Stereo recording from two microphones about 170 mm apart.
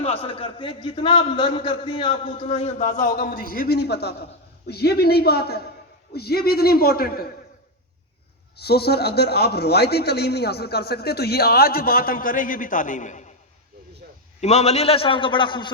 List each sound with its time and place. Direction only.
0.0 s a man's voice: 35° left (ahead or behind)
3.2 s a man's voice: 55° left (ahead or behind)
8.5 s a man's voice: 70° left (ahead or behind); by 13.3 s 45° left (ahead or behind)
14.4 s a man's voice: 40° left (ahead or behind)